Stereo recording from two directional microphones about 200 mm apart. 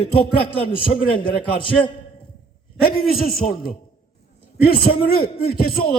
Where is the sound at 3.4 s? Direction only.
45° left (ahead or behind).